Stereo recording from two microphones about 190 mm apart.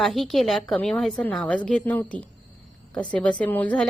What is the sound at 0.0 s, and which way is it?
A woman's voice, centre (ahead or behind).